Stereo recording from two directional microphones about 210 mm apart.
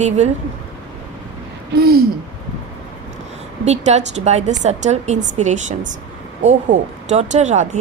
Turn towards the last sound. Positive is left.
turn(degrees=-35)  # may be behind; listen again after turning